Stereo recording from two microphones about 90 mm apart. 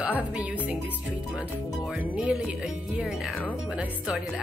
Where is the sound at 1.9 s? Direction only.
5° right (ahead or behind).